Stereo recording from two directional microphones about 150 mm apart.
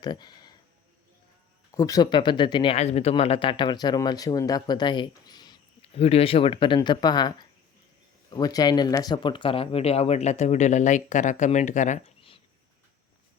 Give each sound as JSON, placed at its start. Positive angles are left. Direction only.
{"t": 0.0, "sound": "speech", "side_deg": 30}
{"t": 1.7, "sound": "speech", "side_deg": 25}
{"t": 2.7, "sound": "speech", "side_deg": 45}
{"t": 5.8, "sound": "speech", "side_deg": 40}